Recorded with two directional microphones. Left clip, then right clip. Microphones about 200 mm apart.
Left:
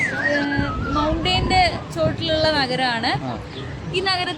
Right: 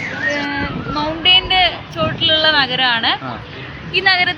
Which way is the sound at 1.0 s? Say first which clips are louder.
Right 8 dB; 15° left (ahead or behind).